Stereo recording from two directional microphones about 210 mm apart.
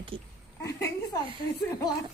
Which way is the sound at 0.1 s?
25° right (ahead or behind).